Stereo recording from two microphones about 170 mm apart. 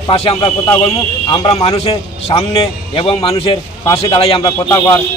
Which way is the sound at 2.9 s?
30° left (ahead or behind).